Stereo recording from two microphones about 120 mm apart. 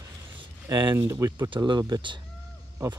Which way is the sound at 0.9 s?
25° right (ahead or behind).